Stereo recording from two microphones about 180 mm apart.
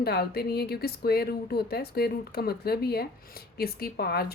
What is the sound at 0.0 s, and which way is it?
Speech, 60° left (ahead or behind).